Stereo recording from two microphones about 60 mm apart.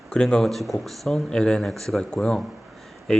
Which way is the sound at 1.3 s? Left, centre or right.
Centre.